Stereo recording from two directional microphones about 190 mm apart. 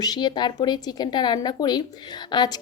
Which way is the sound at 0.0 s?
20° left (ahead or behind).